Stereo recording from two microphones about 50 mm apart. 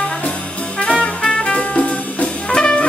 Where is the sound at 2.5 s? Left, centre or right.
Left.